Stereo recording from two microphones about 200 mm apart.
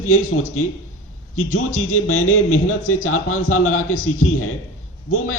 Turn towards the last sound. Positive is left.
turn(degrees=90)